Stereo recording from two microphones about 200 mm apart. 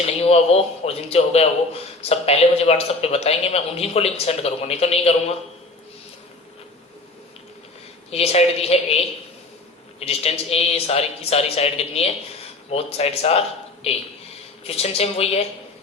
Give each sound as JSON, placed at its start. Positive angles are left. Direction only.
{"t": 0.0, "sound": "speech", "side_deg": 30}
{"t": 8.1, "sound": "speech", "side_deg": 30}
{"t": 10.0, "sound": "speech", "side_deg": 30}